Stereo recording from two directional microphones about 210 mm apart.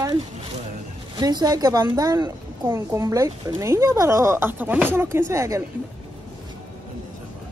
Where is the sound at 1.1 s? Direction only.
20° right (ahead or behind).